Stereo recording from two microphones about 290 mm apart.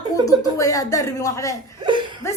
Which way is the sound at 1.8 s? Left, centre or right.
Centre.